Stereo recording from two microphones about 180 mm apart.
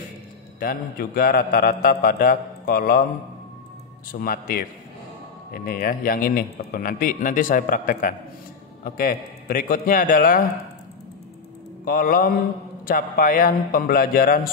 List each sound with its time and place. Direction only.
0.6 s a man's voice: 50° left (ahead or behind)
4.1 s a man's voice: 55° left (ahead or behind)
11.8 s a man's voice: 55° left (ahead or behind)